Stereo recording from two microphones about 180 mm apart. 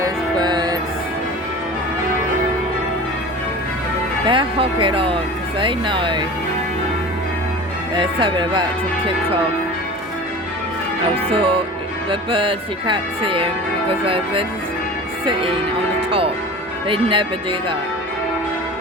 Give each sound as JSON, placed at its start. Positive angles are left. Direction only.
{"t": 0.0, "sound": "music", "side_deg": -25}
{"t": 4.3, "sound": "speech", "side_deg": -30}
{"t": 7.9, "sound": "speech", "side_deg": -25}
{"t": 11.3, "sound": "speech", "side_deg": -30}
{"t": 16.0, "sound": "change ringing", "side_deg": -30}
{"t": 16.9, "sound": "speech", "side_deg": -30}